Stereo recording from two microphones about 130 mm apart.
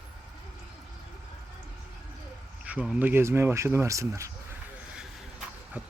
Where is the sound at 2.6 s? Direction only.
10° right (ahead or behind).